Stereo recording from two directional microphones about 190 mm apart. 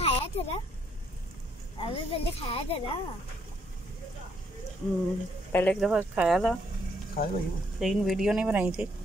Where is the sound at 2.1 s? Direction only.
30° left (ahead or behind).